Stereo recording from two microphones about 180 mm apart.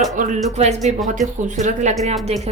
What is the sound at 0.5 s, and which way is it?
Speech, 40° right (ahead or behind).